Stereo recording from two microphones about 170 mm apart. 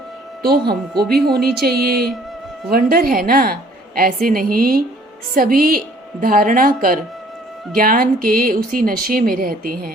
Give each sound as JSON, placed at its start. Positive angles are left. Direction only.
{"t": 0.4, "sound": "speech", "side_deg": -65}